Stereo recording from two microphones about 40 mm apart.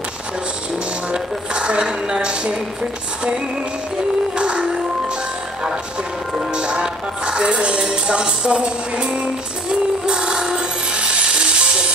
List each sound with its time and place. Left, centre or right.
1.1 s a sound: right
4.4 s music: right
6.5 s music: right